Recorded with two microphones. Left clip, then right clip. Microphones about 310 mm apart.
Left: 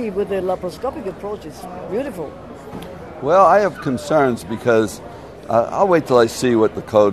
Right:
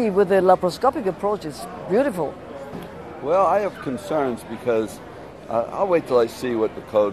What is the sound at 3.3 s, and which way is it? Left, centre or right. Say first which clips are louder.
Speech: left 6 dB; left.